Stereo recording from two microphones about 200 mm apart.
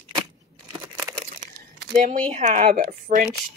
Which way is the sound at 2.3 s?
35° right (ahead or behind).